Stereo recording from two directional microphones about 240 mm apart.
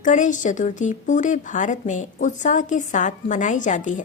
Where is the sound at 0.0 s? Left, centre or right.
Left.